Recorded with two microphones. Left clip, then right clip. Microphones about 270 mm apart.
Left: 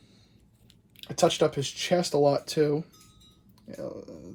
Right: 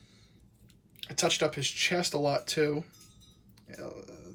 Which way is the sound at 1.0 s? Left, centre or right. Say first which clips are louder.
Left 5 dB; centre.